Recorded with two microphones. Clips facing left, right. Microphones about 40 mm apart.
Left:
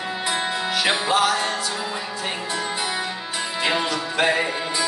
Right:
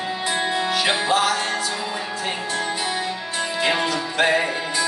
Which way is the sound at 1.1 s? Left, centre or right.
Centre.